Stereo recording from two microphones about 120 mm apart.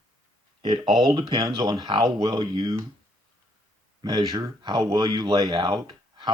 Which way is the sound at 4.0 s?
30° right (ahead or behind).